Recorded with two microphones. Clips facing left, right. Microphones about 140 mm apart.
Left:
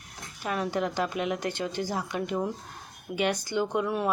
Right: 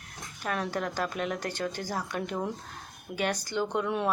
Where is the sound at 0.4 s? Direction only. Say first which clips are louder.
Left 3 dB; 5° left (ahead or behind).